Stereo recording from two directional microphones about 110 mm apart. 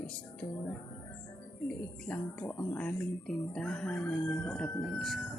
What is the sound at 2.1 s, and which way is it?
Speech, 10° left (ahead or behind).